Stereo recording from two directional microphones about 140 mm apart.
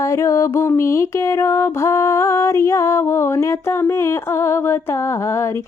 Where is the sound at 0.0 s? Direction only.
20° left (ahead or behind).